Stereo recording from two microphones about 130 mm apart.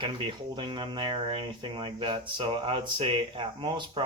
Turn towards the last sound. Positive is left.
turn(degrees=-40)  # may be behind; listen again after turning